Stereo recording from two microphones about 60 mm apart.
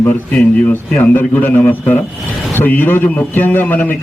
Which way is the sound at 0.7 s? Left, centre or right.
Left.